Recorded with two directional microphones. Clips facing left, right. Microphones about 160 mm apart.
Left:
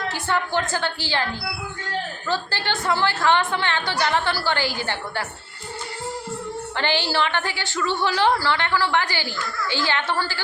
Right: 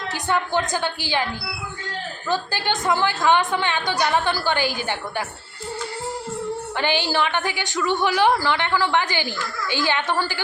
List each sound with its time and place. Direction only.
0.1 s a woman's voice: 15° right (ahead or behind)
2.3 s a woman's voice: 15° right (ahead or behind)
6.7 s a woman's voice: 15° right (ahead or behind)